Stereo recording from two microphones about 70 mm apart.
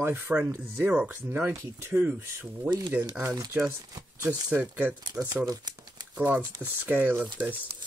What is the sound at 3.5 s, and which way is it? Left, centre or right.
Speech, right.